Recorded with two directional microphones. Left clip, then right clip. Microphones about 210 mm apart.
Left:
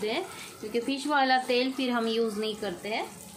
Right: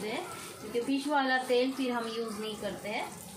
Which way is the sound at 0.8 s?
50° left (ahead or behind).